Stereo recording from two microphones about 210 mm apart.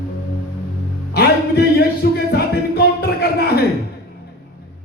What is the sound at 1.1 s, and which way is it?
Music, 50° left (ahead or behind).